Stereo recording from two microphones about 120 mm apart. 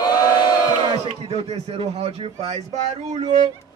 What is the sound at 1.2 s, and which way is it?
Speech, 60° right (ahead or behind).